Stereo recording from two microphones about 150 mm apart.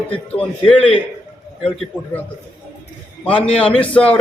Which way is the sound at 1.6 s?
Centre (ahead or behind).